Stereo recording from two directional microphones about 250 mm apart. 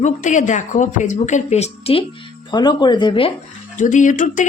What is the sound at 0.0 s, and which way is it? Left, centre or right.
A woman's voice, left.